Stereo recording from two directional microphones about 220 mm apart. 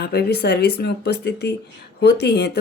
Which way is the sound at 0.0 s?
50° left (ahead or behind).